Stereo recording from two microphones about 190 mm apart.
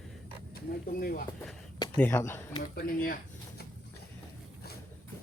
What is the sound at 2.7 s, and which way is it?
Speech, 55° left (ahead or behind).